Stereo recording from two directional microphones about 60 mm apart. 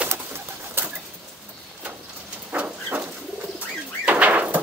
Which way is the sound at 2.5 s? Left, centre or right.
Right.